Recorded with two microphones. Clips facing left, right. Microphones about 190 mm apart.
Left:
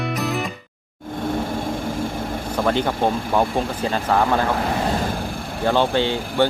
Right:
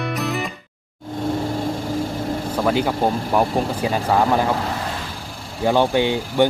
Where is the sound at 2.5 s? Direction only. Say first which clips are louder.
Even; 5° right (ahead or behind).